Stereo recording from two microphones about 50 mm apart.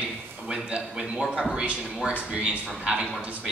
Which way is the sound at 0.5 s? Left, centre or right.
Centre.